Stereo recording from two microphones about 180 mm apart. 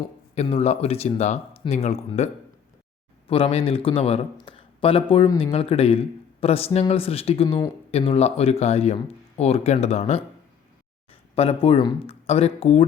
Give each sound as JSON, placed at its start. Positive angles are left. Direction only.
{"t": 0.3, "sound": "speech", "side_deg": 35}